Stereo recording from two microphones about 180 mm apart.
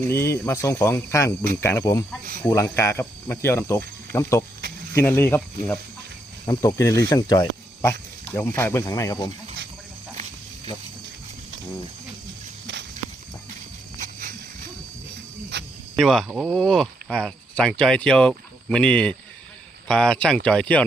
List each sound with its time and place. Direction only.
0.0 s speech: 15° left (ahead or behind)
6.4 s speech: 20° left (ahead or behind)
14.0 s a sound: 50° right (ahead or behind)
15.5 s cricket: 70° right (ahead or behind)
16.0 s speech: centre (ahead or behind)